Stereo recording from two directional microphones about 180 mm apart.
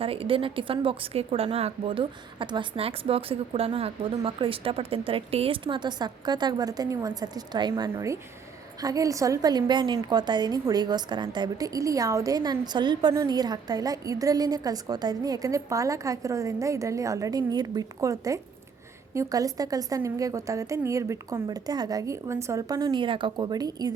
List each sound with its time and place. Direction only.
0.0 s a woman's voice: 30° right (ahead or behind)
22.9 s a woman's voice: 30° right (ahead or behind)